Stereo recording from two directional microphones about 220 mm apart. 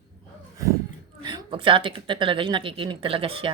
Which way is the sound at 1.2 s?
20° right (ahead or behind).